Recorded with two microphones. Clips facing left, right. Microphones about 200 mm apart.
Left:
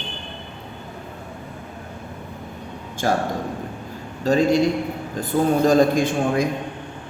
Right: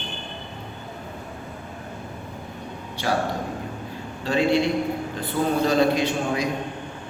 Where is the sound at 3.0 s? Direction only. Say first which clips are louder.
Left 3 dB; 45° left (ahead or behind).